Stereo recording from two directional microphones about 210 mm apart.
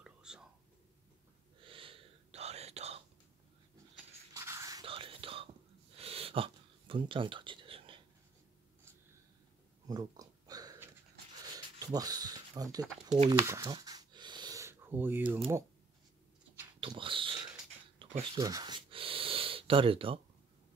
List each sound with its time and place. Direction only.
0.0 s whispering: 5° right (ahead or behind)
1.6 s whispering: 25° right (ahead or behind)
4.3 s whispering: 15° right (ahead or behind)
5.9 s a sound: 30° right (ahead or behind)
9.8 s a sound: 15° right (ahead or behind)
16.8 s dog: 25° right (ahead or behind)
18.3 s gasp: 20° right (ahead or behind)